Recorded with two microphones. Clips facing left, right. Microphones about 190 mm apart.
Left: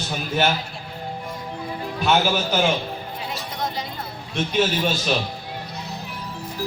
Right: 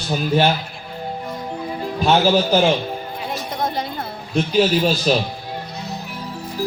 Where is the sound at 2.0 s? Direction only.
30° right (ahead or behind).